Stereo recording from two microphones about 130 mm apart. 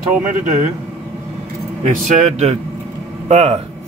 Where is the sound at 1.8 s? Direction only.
70° right (ahead or behind).